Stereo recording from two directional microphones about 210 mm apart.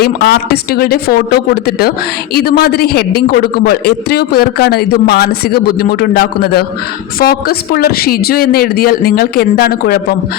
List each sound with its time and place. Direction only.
0.0 s a man's voice: 50° left (ahead or behind)
2.3 s a man's voice: 45° left (ahead or behind)